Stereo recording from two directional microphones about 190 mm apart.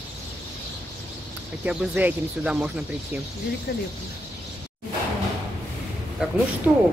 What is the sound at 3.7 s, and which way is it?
Speech, 55° left (ahead or behind).